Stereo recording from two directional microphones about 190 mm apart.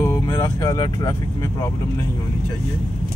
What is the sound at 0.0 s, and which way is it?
Vehicle, 15° left (ahead or behind).